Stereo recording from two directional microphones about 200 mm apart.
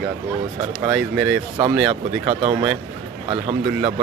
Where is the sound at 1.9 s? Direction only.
25° right (ahead or behind).